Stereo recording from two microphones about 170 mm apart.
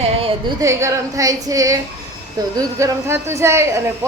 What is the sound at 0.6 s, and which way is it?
A woman's voice, 15° right (ahead or behind).